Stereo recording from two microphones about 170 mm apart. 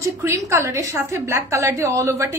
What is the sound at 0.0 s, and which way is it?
A woman's voice, 15° right (ahead or behind).